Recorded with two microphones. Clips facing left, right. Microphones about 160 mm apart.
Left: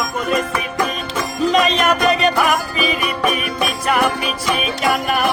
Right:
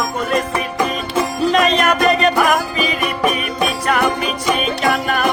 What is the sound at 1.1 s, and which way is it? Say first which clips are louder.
Music: right 1 dB; 5° right (ahead or behind).